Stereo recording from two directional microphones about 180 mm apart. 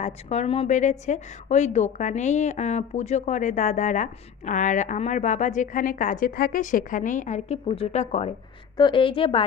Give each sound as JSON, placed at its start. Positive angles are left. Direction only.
{"t": 0.0, "sound": "a woman's voice", "side_deg": 40}